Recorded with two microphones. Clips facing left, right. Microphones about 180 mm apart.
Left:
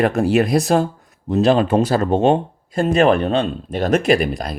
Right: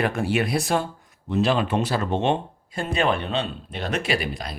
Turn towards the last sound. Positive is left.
turn(degrees=45)  # may be behind; listen again after turning